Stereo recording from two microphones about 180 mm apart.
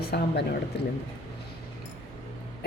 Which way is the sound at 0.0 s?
60° left (ahead or behind).